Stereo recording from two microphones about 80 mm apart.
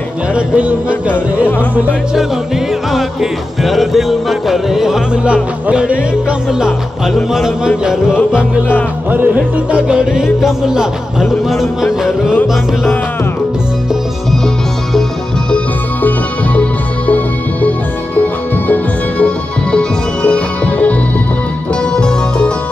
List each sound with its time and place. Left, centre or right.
0.3 s music: centre
2.9 s music: centre
7.2 s music: centre
9.1 s music: right
9.7 s music: centre
17.1 s music: left
21.9 s music: centre